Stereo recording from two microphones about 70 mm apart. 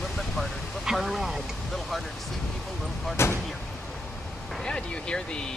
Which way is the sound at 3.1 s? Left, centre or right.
Left.